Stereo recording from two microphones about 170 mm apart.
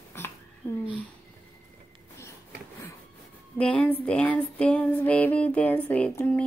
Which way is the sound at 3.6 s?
5° left (ahead or behind).